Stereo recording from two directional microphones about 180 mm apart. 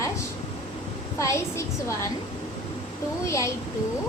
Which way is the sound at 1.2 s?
15° left (ahead or behind).